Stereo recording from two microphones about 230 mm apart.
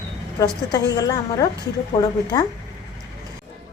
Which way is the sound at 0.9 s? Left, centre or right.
Centre.